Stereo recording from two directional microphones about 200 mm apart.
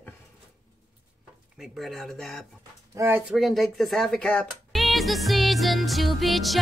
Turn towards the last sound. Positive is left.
turn(degrees=0)  # may be behind; listen again after turning